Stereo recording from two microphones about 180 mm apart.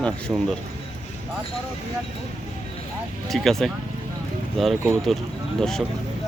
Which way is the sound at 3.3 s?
Centre (ahead or behind).